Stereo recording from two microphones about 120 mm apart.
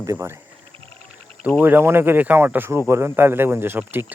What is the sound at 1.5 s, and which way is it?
Speech, 15° right (ahead or behind).